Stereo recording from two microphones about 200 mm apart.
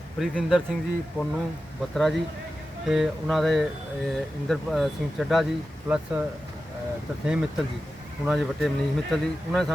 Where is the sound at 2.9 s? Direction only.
Centre (ahead or behind).